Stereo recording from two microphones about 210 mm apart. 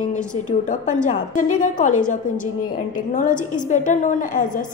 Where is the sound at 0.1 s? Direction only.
35° left (ahead or behind).